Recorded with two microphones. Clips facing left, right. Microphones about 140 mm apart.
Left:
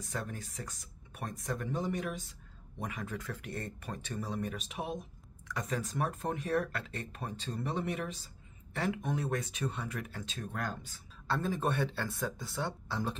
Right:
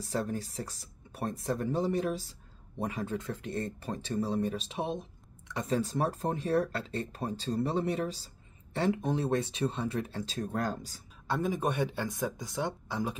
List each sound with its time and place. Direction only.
0.0 s speech: 30° right (ahead or behind)
11.2 s speech: 15° right (ahead or behind)